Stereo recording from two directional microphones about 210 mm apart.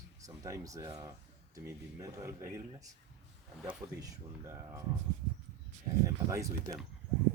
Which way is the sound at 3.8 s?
15° right (ahead or behind).